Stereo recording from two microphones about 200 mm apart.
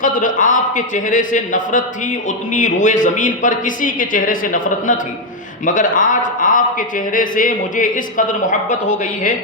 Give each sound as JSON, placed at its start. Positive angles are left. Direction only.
{"t": 0.0, "sound": "speech", "side_deg": 40}